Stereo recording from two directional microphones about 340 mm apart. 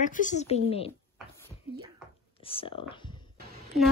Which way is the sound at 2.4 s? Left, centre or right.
Centre.